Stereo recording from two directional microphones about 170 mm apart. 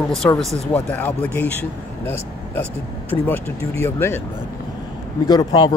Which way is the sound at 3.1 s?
10° left (ahead or behind).